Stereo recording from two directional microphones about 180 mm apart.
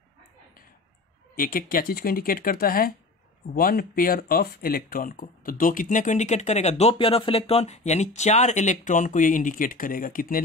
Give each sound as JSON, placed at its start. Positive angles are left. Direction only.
{"t": 1.3, "sound": "speech", "side_deg": 55}